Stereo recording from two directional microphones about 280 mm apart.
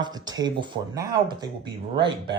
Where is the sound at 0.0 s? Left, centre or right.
Centre.